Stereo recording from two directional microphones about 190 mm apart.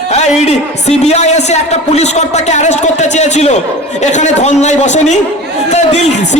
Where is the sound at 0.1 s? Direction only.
35° left (ahead or behind).